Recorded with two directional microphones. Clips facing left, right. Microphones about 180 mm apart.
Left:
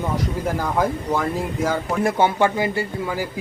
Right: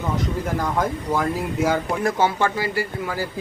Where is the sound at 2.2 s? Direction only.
20° left (ahead or behind).